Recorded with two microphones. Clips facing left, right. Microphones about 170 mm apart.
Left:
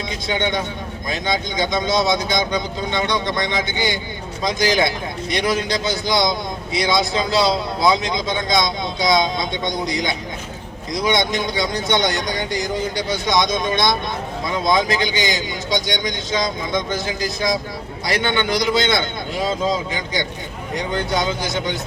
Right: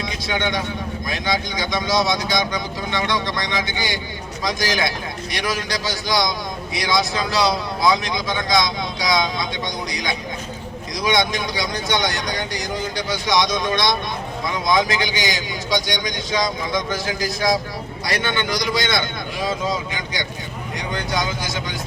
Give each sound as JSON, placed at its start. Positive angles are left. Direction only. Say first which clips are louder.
{"t": 1.1, "sound": "speech", "louder": "left 2 dB", "side_deg": 25}
{"t": 21.1, "sound": "speech", "louder": "left 3 dB", "side_deg": 25}